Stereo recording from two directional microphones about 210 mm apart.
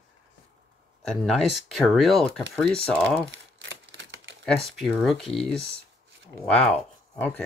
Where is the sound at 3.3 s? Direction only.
60° right (ahead or behind).